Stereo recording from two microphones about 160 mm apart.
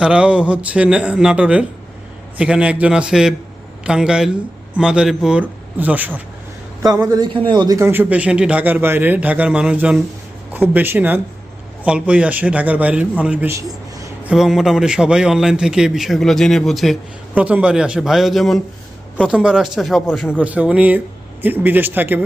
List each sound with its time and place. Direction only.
0.0 s a man's voice: 5° right (ahead or behind)
7.1 s a man's voice: 25° right (ahead or behind)
7.8 s a man's voice: 15° right (ahead or behind)
14.3 s a man's voice: centre (ahead or behind)